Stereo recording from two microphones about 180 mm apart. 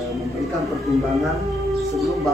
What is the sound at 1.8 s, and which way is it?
Music, centre (ahead or behind).